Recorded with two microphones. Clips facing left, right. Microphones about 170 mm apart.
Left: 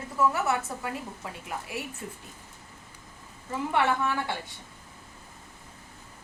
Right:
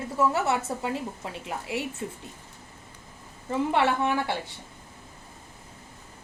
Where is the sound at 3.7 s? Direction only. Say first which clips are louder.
Right 1 dB; 25° right (ahead or behind).